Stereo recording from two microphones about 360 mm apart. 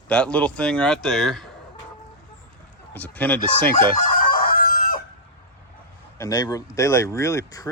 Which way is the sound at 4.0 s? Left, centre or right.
Left.